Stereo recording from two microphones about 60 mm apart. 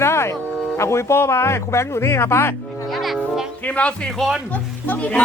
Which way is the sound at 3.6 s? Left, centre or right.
Left.